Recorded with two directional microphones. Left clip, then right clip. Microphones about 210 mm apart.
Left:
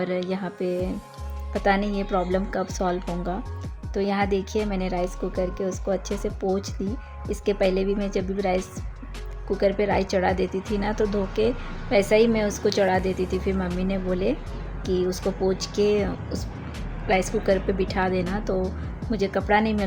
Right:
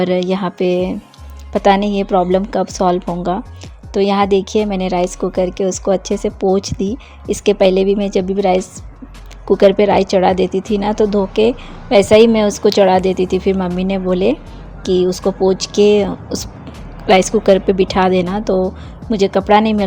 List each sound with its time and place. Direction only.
0.0 s a woman's voice: 35° right (ahead or behind)